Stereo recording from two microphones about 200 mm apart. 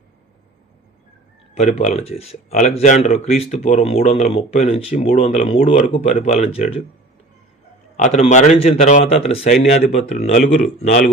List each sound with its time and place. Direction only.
1.5 s speech: 35° left (ahead or behind)
7.9 s speech: 35° left (ahead or behind)
10.3 s speech: 45° left (ahead or behind)